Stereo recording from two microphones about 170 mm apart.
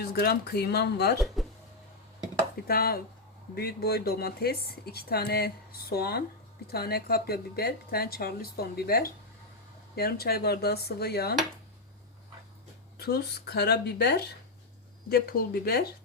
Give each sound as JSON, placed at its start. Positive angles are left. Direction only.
{"t": 0.0, "sound": "dishes", "side_deg": 70}
{"t": 2.6, "sound": "a woman's voice", "side_deg": 60}
{"t": 9.9, "sound": "dishes", "side_deg": 65}
{"t": 13.0, "sound": "dishes", "side_deg": 65}
{"t": 15.1, "sound": "a woman's voice", "side_deg": 65}